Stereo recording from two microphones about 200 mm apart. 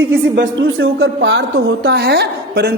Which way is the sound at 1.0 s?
55° right (ahead or behind).